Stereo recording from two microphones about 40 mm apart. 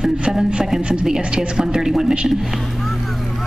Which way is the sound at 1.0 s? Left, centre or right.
Centre.